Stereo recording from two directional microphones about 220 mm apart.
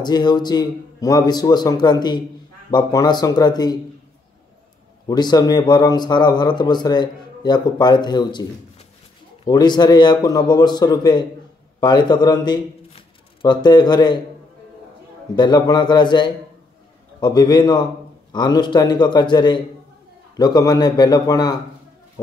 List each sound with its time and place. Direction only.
0.0 s a man's voice: 20° left (ahead or behind)
5.0 s a man's voice: 20° left (ahead or behind)
15.3 s a man's voice: 20° left (ahead or behind)